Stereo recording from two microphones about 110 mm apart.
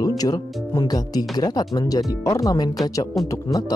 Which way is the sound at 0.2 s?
35° left (ahead or behind).